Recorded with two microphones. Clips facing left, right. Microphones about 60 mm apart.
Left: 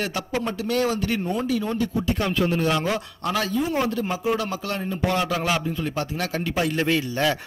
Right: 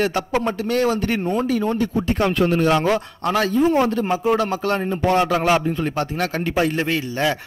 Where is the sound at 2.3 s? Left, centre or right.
Right.